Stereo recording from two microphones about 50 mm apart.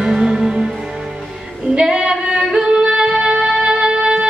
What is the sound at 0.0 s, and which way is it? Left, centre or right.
Music, centre.